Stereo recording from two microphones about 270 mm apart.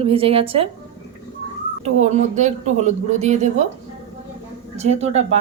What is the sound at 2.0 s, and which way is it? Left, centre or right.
Speech, right.